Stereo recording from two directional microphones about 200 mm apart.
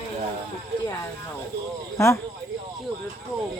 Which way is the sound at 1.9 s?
15° left (ahead or behind).